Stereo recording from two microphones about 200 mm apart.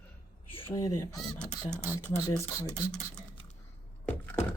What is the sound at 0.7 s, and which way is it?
Speech, 20° left (ahead or behind).